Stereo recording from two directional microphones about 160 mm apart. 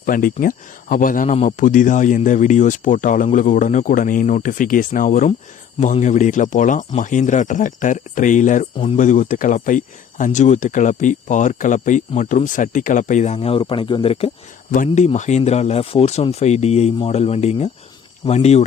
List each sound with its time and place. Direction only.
0.0 s speech: 60° left (ahead or behind); by 14.3 s 35° left (ahead or behind)
14.7 s speech: 50° left (ahead or behind)